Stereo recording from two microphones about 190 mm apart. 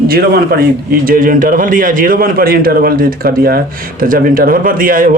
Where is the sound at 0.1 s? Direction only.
55° right (ahead or behind).